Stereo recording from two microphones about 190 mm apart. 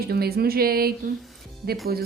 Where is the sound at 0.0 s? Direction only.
55° right (ahead or behind).